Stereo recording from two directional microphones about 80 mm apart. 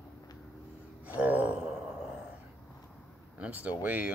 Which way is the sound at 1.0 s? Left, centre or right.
Right.